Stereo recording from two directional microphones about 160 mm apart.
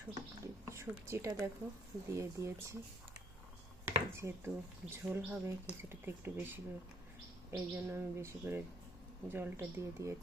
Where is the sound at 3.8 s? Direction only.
15° right (ahead or behind).